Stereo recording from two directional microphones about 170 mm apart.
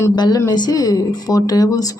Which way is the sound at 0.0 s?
20° left (ahead or behind).